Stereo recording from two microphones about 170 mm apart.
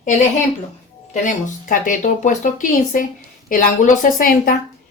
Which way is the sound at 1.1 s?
50° left (ahead or behind).